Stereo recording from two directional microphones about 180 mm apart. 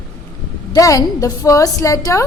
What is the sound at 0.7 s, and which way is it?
A woman's voice, 20° left (ahead or behind).